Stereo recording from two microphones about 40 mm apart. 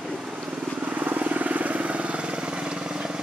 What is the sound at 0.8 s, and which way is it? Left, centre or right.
Vehicle, right.